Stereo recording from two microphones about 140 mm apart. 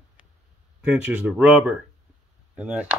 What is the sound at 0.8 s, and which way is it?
Speech, 10° right (ahead or behind).